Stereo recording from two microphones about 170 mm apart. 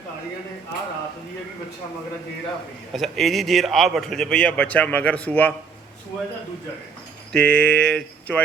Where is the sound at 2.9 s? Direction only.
Centre (ahead or behind).